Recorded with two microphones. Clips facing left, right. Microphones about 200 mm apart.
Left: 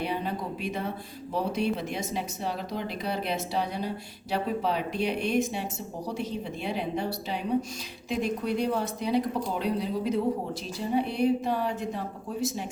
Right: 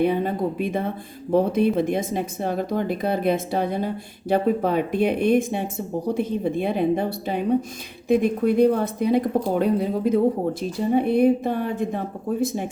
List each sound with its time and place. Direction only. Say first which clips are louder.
0.0 s speech: right 10 dB; 50° right (ahead or behind)